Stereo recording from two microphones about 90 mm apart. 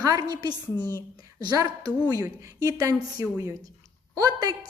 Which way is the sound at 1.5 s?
45° right (ahead or behind).